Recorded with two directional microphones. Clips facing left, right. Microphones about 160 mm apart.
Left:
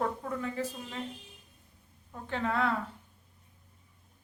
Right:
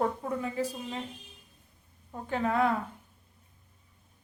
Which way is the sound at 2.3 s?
10° right (ahead or behind).